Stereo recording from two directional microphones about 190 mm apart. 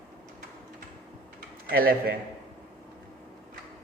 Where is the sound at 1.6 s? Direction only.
50° right (ahead or behind).